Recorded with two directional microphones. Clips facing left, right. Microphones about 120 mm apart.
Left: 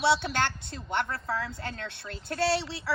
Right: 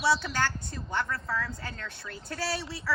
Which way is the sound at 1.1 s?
30° left (ahead or behind).